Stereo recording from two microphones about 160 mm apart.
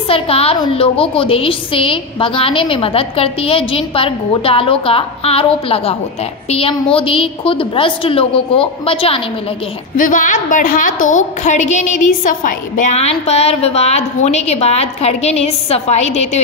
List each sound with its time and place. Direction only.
0.1 s a woman's voice: 35° left (ahead or behind)
9.9 s a woman's voice: 55° left (ahead or behind)